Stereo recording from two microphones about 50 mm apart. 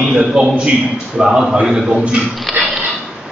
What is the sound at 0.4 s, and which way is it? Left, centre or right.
A man's voice, right.